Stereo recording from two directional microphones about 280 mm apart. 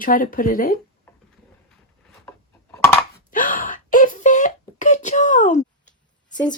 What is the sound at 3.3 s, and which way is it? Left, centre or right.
Wail, left.